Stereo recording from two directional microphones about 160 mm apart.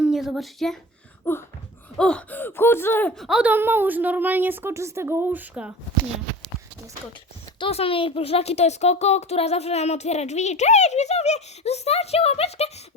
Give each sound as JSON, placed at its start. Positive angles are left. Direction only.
{"t": 0.0, "sound": "speech", "side_deg": 0}
{"t": 1.2, "sound": "a sound", "side_deg": 15}
{"t": 2.0, "sound": "speech", "side_deg": 5}
{"t": 3.2, "sound": "a woman's voice", "side_deg": -5}
{"t": 7.6, "sound": "a child's voice", "side_deg": 35}